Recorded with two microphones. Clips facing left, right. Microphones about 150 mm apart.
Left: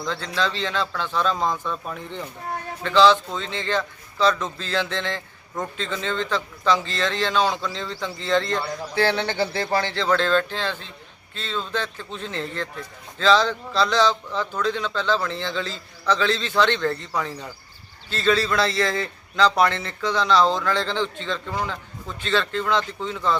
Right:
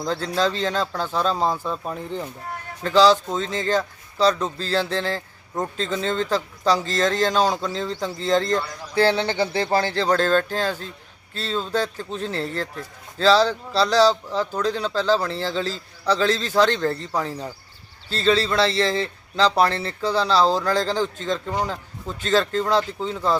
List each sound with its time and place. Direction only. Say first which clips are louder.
0.0 s a man's voice: right 4 dB; 40° right (ahead or behind)
9.2 s speech: right 1 dB; 15° right (ahead or behind)
9.5 s a man's voice: right 3 dB; 25° right (ahead or behind)